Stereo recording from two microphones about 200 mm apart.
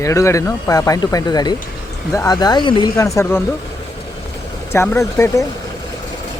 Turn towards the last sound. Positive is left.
turn(degrees=15)  # may be behind; listen again after turning